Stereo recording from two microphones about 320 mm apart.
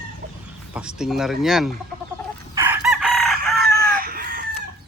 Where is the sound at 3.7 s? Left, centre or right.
Right.